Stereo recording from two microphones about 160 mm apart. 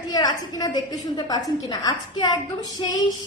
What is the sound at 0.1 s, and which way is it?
A woman's voice, 25° left (ahead or behind).